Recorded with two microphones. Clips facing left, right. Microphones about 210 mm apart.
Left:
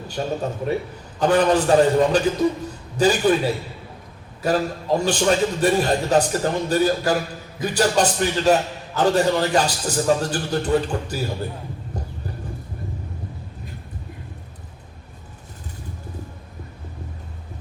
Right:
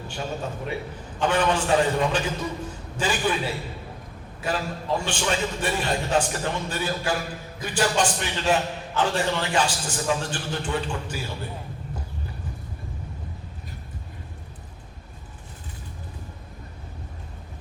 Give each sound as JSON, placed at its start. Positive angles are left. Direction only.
{"t": 0.1, "sound": "a man's voice", "side_deg": 40}